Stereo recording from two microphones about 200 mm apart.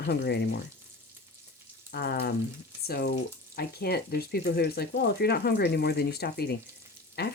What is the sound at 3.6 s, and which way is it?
Speech, 50° left (ahead or behind).